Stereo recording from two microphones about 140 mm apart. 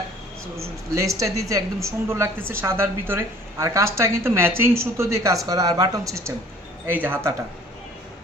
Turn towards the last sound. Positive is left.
turn(degrees=-15)  # may be behind; listen again after turning